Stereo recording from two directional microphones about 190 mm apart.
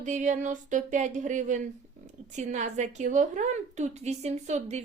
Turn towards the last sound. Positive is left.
turn(degrees=-35)  # may be behind; listen again after turning